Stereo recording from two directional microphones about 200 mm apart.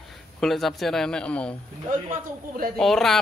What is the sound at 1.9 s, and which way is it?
Speech, 45° right (ahead or behind).